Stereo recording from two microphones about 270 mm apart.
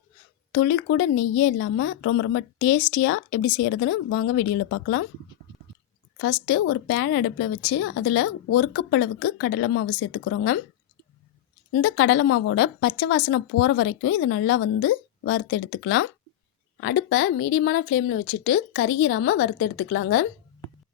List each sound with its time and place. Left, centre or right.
0.5 s speech: left
6.1 s speech: left
11.7 s a woman's voice: left